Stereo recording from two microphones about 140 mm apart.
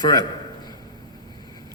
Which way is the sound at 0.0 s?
30° left (ahead or behind).